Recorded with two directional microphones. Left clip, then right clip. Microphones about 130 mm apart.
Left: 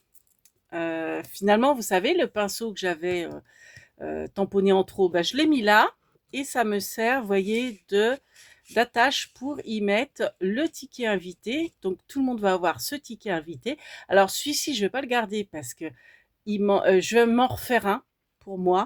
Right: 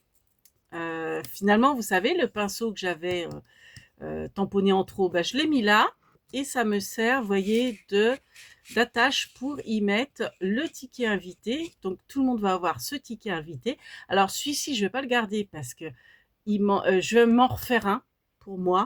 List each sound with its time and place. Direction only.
0.7 s speech: 25° left (ahead or behind)